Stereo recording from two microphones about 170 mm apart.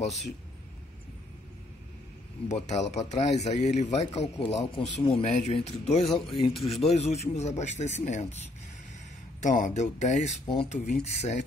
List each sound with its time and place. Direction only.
2.4 s a man's voice: 40° left (ahead or behind)
9.4 s speech: 45° left (ahead or behind)
10.4 s a man's voice: 30° left (ahead or behind)
11.1 s a man's voice: 40° left (ahead or behind)